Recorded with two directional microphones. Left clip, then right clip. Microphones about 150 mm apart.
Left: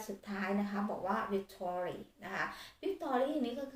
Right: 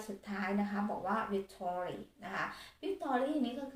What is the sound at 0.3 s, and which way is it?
Speech, 5° left (ahead or behind).